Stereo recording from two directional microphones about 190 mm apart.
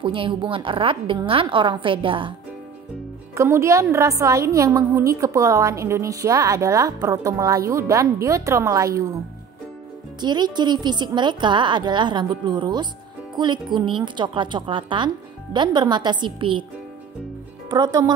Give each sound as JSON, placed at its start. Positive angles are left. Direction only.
{"t": 0.0, "sound": "a woman's voice", "side_deg": -25}
{"t": 3.3, "sound": "a woman's voice", "side_deg": -15}
{"t": 10.2, "sound": "a woman's voice", "side_deg": -20}
{"t": 17.6, "sound": "a woman's voice", "side_deg": -20}